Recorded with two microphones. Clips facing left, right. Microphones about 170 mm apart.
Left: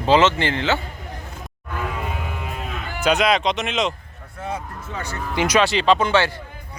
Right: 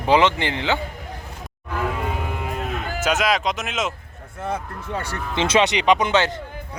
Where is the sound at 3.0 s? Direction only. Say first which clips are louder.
Left 3 dB; centre (ahead or behind).